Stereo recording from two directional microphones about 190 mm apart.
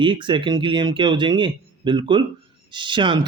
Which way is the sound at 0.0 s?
25° right (ahead or behind).